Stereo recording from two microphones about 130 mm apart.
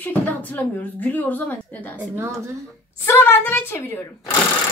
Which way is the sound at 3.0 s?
15° left (ahead or behind).